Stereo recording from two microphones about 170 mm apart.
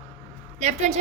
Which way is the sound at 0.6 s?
40° right (ahead or behind).